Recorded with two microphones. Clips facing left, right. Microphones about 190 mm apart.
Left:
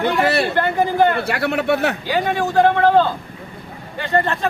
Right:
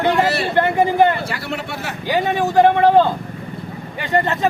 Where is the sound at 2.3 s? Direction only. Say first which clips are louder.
Right 2 dB; 20° right (ahead or behind).